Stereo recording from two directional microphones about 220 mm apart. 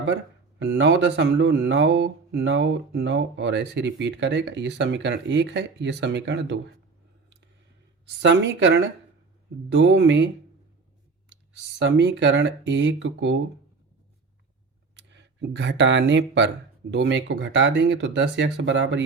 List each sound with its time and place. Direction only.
0.6 s speech: 50° right (ahead or behind)
8.2 s speech: 55° right (ahead or behind)
11.8 s speech: 55° right (ahead or behind)
14.9 s speech: 55° right (ahead or behind)